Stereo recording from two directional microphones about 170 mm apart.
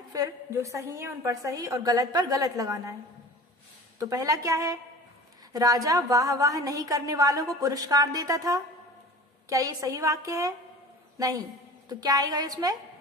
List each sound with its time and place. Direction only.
0.1 s a woman's voice: 20° right (ahead or behind)
4.0 s a woman's voice: 20° right (ahead or behind)